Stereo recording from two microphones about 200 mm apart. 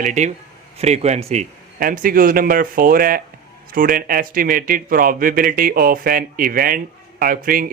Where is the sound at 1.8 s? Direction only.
45° right (ahead or behind).